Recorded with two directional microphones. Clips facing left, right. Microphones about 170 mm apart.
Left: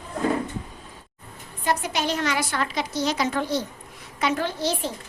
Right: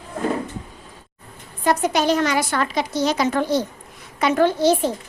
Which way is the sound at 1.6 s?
45° right (ahead or behind).